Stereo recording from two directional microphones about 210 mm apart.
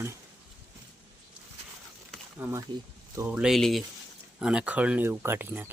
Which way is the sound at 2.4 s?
10° right (ahead or behind).